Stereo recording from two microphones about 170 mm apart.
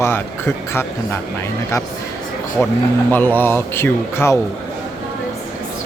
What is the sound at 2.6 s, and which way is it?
Speech, 10° left (ahead or behind).